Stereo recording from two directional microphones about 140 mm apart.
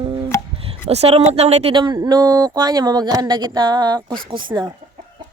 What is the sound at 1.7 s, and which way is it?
Speech, 30° right (ahead or behind).